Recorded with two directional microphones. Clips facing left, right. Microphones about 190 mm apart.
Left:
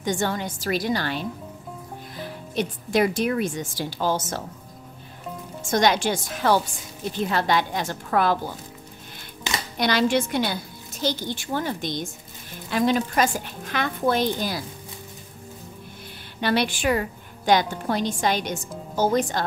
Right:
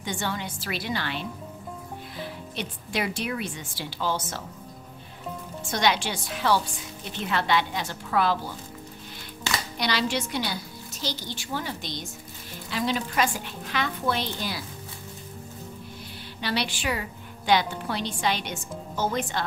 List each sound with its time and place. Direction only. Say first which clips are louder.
0.0 s a woman's voice: left 6 dB; 45° left (ahead or behind)
5.7 s a woman's voice: left 5 dB; 45° left (ahead or behind)
9.8 s a woman's voice: left 7 dB; 50° left (ahead or behind)
16.3 s a woman's voice: left 6 dB; 50° left (ahead or behind)